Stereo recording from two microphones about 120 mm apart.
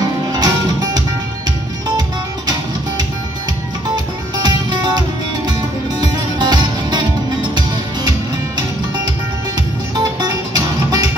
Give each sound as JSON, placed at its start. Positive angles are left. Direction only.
{"t": 0.3, "sound": "music", "side_deg": -35}
{"t": 3.9, "sound": "music", "side_deg": -35}
{"t": 10.2, "sound": "music", "side_deg": -35}